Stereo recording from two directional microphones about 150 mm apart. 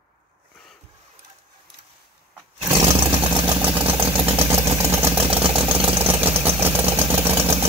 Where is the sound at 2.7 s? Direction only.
20° right (ahead or behind).